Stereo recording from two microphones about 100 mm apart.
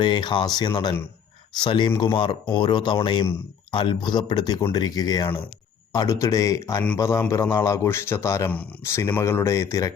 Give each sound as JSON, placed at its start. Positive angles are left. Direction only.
{"t": 0.0, "sound": "speech", "side_deg": 50}
{"t": 6.1, "sound": "speech", "side_deg": 30}